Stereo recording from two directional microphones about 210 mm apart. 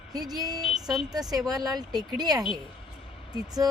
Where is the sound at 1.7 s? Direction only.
20° right (ahead or behind).